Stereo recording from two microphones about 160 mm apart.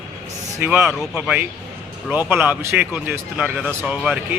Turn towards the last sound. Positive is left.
turn(degrees=-5)  # may be behind; listen again after turning